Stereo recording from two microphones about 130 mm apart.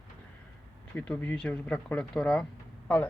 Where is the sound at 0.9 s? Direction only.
10° left (ahead or behind).